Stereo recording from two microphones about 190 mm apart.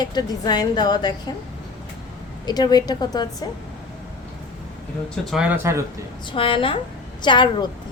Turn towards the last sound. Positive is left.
turn(degrees=25)  # may be behind; listen again after turning